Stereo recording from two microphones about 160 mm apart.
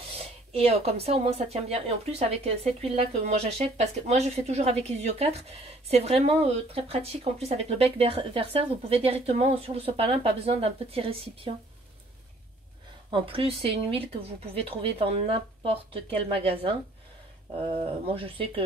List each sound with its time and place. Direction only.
0.5 s speech: 40° right (ahead or behind)
13.1 s speech: 35° right (ahead or behind)